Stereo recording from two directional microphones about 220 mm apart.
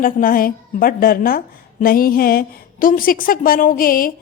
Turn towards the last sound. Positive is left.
turn(degrees=40)  # may be behind; listen again after turning